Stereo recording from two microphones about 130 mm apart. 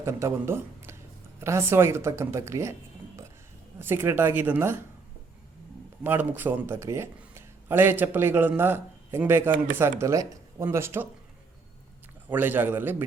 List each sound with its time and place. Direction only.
0.0 s speech: 20° right (ahead or behind)
3.8 s speech: 15° right (ahead or behind)
6.0 s speech: 15° right (ahead or behind)
12.3 s speech: 15° right (ahead or behind)